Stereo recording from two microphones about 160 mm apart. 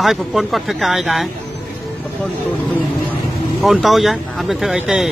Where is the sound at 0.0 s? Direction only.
Centre (ahead or behind).